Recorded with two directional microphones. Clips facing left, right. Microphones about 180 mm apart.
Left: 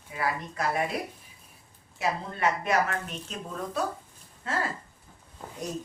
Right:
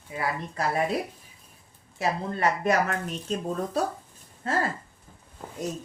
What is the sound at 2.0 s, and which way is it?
Speech, 40° right (ahead or behind).